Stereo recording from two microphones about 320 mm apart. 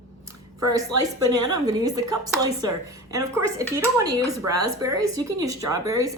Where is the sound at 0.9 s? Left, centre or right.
Right.